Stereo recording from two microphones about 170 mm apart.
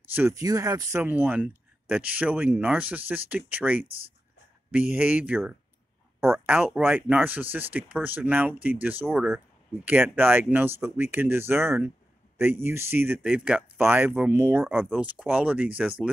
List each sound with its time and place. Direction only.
0.1 s speech: 15° right (ahead or behind)